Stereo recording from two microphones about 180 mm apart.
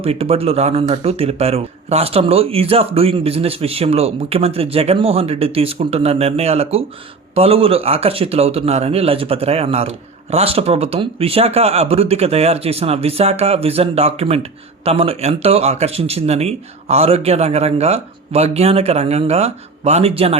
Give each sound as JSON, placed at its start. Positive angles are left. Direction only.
{"t": 0.0, "sound": "a man's voice", "side_deg": -35}